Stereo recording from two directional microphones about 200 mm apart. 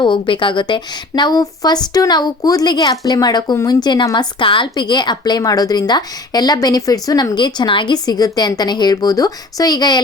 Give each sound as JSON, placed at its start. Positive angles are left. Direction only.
{"t": 0.0, "sound": "a woman's voice", "side_deg": 25}